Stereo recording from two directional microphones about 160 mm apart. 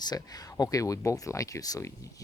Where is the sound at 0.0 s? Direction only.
25° left (ahead or behind).